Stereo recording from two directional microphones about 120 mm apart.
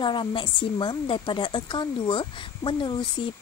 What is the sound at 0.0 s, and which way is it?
Speech, 40° left (ahead or behind).